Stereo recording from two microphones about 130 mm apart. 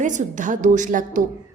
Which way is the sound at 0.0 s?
75° right (ahead or behind).